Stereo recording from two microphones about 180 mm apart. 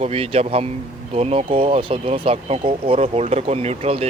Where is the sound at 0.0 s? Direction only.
35° right (ahead or behind).